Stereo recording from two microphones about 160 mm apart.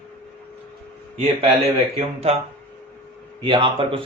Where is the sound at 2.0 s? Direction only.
40° right (ahead or behind).